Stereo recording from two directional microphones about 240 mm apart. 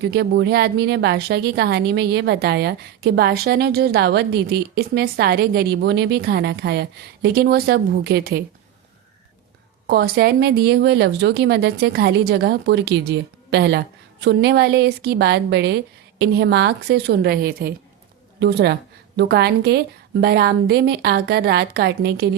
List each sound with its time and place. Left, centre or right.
0.0 s a woman's voice: right
9.8 s a woman's voice: right